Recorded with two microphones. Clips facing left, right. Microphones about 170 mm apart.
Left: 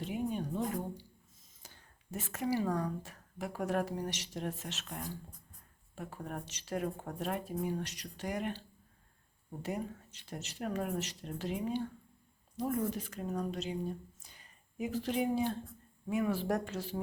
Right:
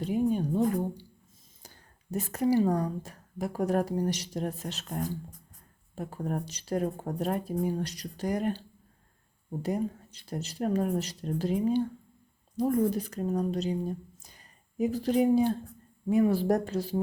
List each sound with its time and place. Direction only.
0.0 s a woman's voice: 40° right (ahead or behind)
9.6 s a woman's voice: 35° right (ahead or behind)